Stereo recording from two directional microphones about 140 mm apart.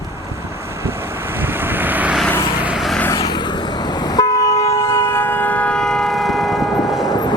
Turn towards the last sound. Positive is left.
turn(degrees=30)  # may be behind; listen again after turning